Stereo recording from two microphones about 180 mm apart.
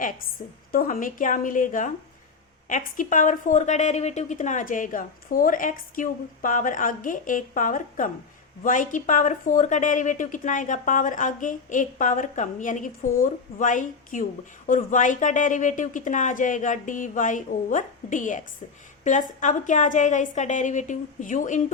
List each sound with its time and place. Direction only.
0.7 s a woman's voice: 50° left (ahead or behind)